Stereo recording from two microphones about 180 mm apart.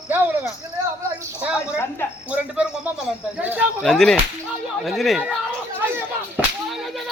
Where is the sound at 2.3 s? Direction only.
5° right (ahead or behind).